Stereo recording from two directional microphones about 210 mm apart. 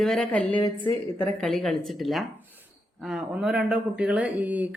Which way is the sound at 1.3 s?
Centre (ahead or behind).